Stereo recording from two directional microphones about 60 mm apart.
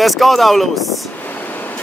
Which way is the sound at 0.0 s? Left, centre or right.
Centre.